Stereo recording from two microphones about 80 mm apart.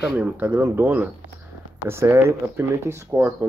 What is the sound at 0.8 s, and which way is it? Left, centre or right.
Speech, right.